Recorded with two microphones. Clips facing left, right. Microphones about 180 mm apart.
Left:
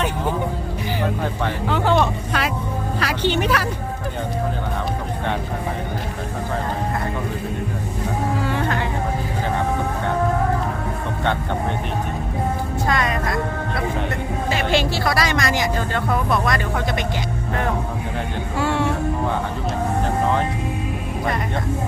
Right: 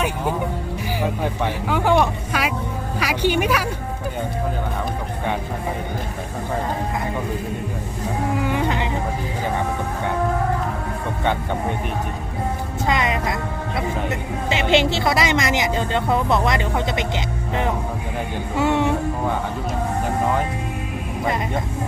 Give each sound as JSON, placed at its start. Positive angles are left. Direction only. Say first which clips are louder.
{"t": 1.0, "sound": "speech", "louder": "right 1 dB", "side_deg": -10}
{"t": 8.4, "sound": "a sound", "louder": "right 1 dB", "side_deg": -15}
{"t": 12.9, "sound": "music", "louder": "right 1 dB", "side_deg": -20}
{"t": 14.5, "sound": "a woman's voice", "louder": "right 3 dB", "side_deg": -20}